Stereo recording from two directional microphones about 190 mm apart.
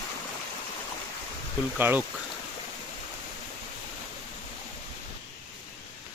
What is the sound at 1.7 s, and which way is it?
Speech, 10° right (ahead or behind).